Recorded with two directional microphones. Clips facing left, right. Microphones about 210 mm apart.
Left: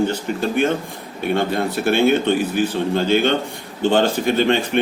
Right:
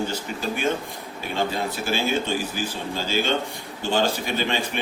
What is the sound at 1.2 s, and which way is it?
A man's voice, 60° left (ahead or behind).